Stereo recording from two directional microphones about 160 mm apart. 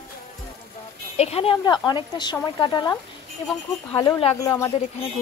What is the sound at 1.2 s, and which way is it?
Speech, 40° left (ahead or behind).